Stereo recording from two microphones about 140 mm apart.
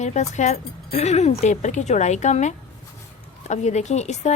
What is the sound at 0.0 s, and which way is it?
Speech, 60° left (ahead or behind).